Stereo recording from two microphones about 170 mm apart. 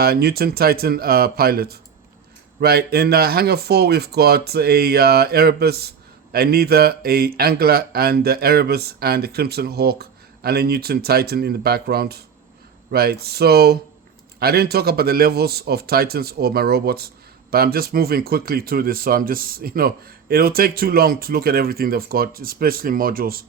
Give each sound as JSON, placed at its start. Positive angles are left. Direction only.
{"t": 0.0, "sound": "speech", "side_deg": -65}